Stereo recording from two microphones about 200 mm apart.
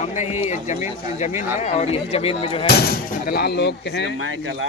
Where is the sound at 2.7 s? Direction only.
50° left (ahead or behind).